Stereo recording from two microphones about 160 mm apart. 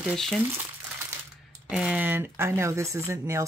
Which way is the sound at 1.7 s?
5° right (ahead or behind).